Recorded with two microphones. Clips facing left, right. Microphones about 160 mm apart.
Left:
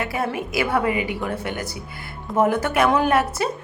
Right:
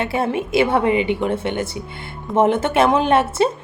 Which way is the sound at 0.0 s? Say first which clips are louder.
Right 4 dB; 25° right (ahead or behind).